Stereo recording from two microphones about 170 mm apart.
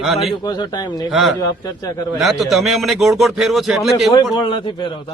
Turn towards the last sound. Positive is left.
turn(degrees=25)  # may be behind; listen again after turning